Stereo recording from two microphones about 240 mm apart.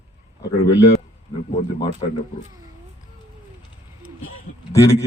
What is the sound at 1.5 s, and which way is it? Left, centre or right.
Speech, left.